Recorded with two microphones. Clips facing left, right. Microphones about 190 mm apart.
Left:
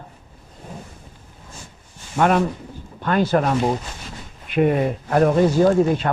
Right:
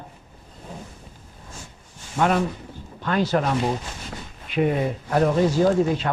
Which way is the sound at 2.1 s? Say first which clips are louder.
Left 3 dB; 60° left (ahead or behind).